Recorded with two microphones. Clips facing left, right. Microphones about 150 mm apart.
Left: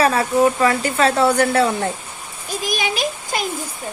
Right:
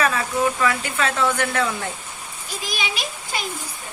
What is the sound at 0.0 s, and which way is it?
Speech, 40° left (ahead or behind).